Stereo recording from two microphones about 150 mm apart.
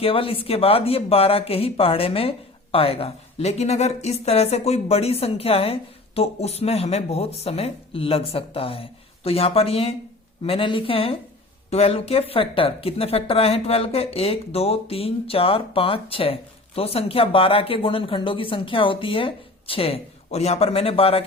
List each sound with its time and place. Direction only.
0.0 s speech: 40° left (ahead or behind)